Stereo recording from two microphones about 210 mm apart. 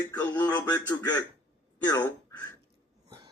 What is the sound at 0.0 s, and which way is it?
Speech, 10° left (ahead or behind).